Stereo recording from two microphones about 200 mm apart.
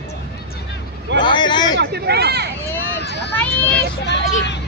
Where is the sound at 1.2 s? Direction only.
25° left (ahead or behind).